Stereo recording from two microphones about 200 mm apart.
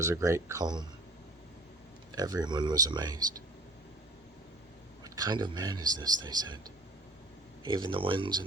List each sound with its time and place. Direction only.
0.0 s speech: 15° right (ahead or behind)
2.1 s speech: 20° right (ahead or behind)
5.0 s speech: 20° right (ahead or behind)
7.6 s speech: 25° right (ahead or behind)